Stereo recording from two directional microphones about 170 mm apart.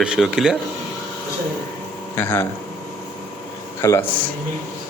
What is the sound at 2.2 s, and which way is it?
Speech, 10° left (ahead or behind).